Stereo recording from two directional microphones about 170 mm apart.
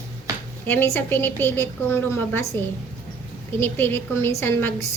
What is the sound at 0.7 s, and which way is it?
A woman's voice, 10° left (ahead or behind).